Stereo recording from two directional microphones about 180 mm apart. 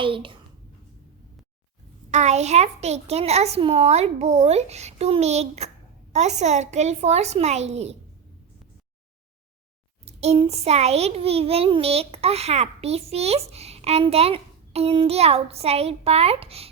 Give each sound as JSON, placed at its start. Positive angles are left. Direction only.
{"t": 0.0, "sound": "a child's voice", "side_deg": -30}
{"t": 2.0, "sound": "a child's voice", "side_deg": -40}
{"t": 10.1, "sound": "a child's voice", "side_deg": -35}